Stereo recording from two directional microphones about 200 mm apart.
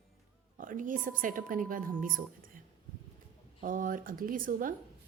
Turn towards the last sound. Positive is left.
turn(degrees=-45)  # may be behind; listen again after turning